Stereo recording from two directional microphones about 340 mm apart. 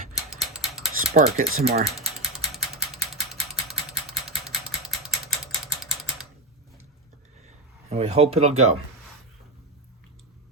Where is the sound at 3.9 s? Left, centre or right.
Centre.